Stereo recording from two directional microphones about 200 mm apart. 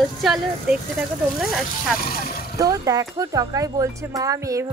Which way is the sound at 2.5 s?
15° right (ahead or behind).